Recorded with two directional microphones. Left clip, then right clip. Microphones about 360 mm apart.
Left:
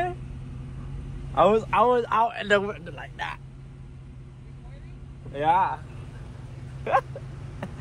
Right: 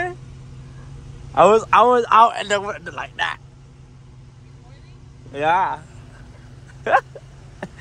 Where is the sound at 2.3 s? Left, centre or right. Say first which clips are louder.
Right 2 dB; centre.